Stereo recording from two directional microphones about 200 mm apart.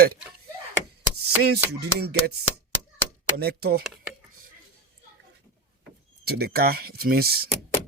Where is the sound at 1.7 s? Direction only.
55° right (ahead or behind).